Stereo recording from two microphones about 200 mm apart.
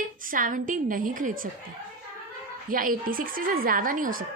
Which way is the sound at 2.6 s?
45° right (ahead or behind).